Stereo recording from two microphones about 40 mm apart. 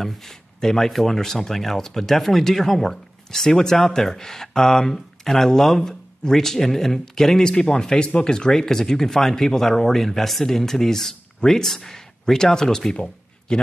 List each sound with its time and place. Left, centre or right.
0.0 s speech: centre
13.5 s a man's voice: left